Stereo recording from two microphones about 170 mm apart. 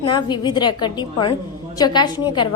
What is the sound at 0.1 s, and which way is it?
A woman's voice, 25° left (ahead or behind).